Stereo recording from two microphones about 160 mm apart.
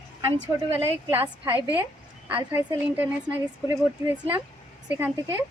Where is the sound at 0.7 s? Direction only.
10° right (ahead or behind).